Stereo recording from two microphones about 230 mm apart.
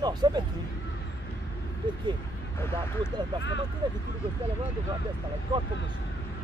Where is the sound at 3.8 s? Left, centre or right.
Centre.